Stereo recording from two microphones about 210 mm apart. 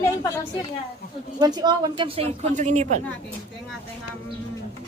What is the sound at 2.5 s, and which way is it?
Speech, 35° right (ahead or behind).